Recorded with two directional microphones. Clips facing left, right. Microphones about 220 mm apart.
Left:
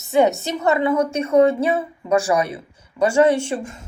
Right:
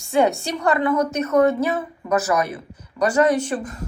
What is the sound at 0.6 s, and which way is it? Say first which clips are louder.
A woman's voice: left 1 dB; 25° left (ahead or behind).